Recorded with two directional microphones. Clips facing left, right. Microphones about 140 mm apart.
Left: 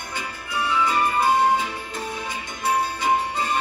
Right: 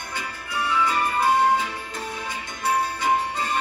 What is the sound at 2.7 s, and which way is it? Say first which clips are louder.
Music: left 1 dB; 15° left (ahead or behind).